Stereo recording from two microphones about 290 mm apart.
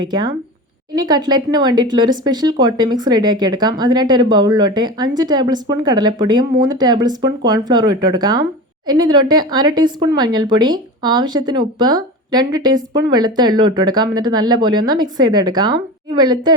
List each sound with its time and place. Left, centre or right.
0.0 s speech: centre